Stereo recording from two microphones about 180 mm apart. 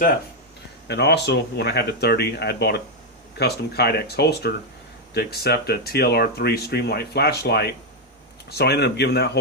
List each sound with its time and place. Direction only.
0.9 s speech: 70° left (ahead or behind)